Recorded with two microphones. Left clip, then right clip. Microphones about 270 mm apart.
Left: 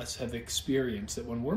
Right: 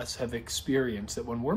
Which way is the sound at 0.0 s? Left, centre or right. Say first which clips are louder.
Right 3 dB; centre.